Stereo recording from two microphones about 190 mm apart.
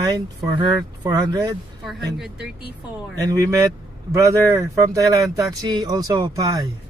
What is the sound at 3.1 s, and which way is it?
Speech, 15° right (ahead or behind).